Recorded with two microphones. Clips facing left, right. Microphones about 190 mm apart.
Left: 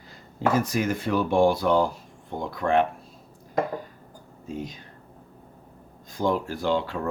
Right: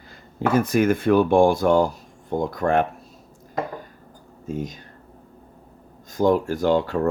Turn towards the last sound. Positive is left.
turn(degrees=-45)  # may be behind; listen again after turning